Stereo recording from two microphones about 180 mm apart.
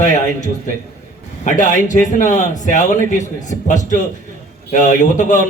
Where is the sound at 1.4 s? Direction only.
45° left (ahead or behind).